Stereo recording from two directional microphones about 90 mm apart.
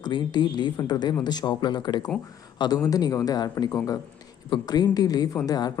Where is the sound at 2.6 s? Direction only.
45° left (ahead or behind).